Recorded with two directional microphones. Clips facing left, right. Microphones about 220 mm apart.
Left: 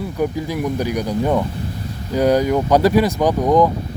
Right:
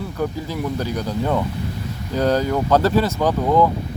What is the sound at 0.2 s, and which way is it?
Speech, 15° left (ahead or behind).